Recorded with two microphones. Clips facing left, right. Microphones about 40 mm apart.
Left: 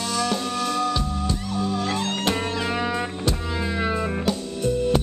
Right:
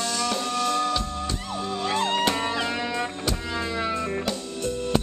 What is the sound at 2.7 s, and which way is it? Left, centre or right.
Music, centre.